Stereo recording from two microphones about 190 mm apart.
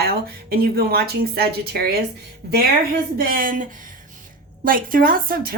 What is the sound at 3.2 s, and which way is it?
A woman's voice, 50° right (ahead or behind).